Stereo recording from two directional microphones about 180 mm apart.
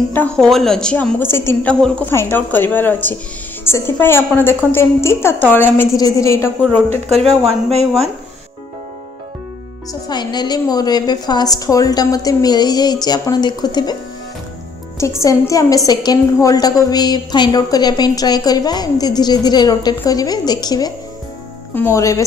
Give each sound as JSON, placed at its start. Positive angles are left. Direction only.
{"t": 0.1, "sound": "a woman's voice", "side_deg": 5}
{"t": 7.1, "sound": "speech", "side_deg": -35}
{"t": 10.0, "sound": "a woman's voice", "side_deg": 25}
{"t": 15.0, "sound": "a woman's voice", "side_deg": 15}